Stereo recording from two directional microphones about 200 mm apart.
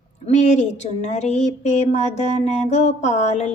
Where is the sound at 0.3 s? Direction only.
35° left (ahead or behind).